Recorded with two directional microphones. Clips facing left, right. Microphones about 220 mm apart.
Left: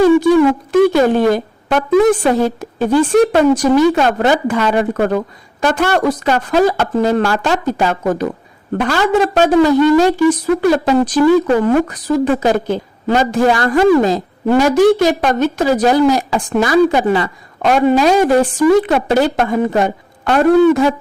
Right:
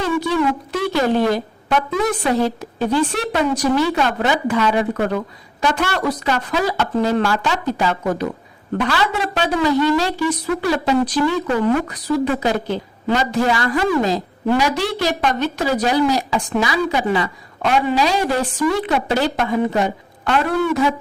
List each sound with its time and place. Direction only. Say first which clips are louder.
1.0 s a woman's voice: left 5 dB; 50° left (ahead or behind)